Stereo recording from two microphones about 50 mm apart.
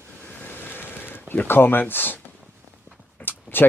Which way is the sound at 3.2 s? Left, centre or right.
Left.